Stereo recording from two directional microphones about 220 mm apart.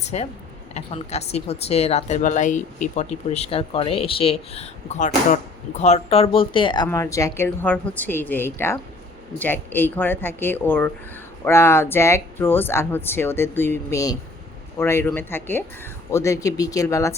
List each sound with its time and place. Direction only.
0.0 s speech: 30° left (ahead or behind); by 17.2 s 15° left (ahead or behind)